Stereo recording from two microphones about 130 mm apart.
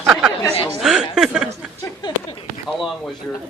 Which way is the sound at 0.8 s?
5° right (ahead or behind).